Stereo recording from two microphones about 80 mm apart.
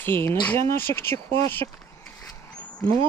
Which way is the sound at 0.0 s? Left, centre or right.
Left.